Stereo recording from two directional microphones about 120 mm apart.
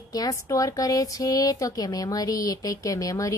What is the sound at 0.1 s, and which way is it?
Speech, 30° left (ahead or behind).